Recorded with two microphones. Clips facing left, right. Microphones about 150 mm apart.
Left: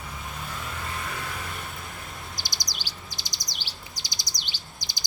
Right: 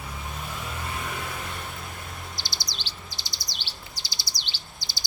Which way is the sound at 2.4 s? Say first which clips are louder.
Even; 15° left (ahead or behind).